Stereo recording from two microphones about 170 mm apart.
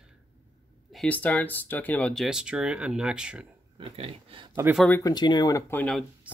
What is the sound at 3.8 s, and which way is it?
Speech, 35° right (ahead or behind).